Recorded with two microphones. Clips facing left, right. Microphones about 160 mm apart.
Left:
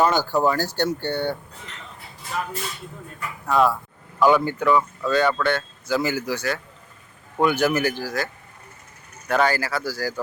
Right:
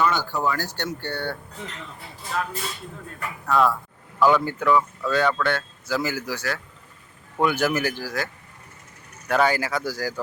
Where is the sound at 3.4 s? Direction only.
15° left (ahead or behind).